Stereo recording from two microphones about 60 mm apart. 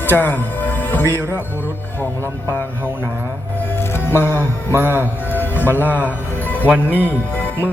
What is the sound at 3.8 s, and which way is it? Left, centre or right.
Music, left.